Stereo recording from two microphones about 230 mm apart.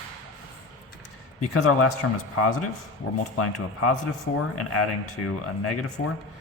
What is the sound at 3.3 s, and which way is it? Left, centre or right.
Speech, left.